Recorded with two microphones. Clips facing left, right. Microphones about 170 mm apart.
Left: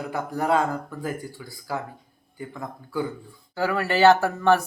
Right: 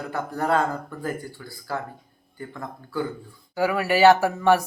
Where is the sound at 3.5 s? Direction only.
15° right (ahead or behind).